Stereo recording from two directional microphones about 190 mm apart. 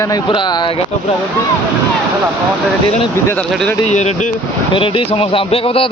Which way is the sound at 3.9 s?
35° left (ahead or behind).